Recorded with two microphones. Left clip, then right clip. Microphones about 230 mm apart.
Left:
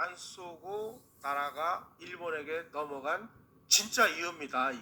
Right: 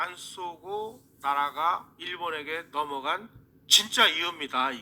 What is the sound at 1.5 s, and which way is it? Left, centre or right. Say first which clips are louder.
Speech: right 7 dB; right.